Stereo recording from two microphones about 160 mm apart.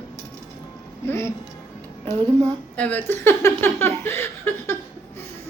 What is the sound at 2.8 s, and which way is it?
Speech, 10° left (ahead or behind).